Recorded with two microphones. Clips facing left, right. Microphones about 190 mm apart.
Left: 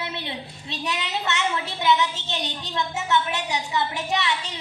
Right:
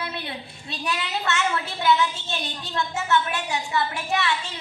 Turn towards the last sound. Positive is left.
turn(degrees=20)  # may be behind; listen again after turning